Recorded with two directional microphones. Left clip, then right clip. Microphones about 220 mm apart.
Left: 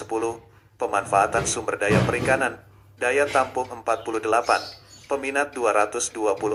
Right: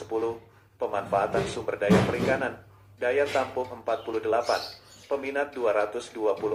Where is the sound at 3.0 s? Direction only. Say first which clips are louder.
Left 4 dB; 40° left (ahead or behind).